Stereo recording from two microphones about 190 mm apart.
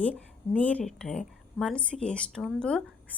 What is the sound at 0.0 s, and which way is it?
A woman's voice, 5° left (ahead or behind).